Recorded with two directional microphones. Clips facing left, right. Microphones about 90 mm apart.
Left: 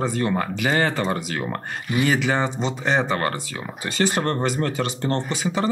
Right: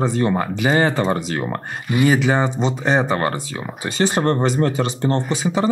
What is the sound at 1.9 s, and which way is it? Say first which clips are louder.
Speech: right 4 dB; 10° right (ahead or behind).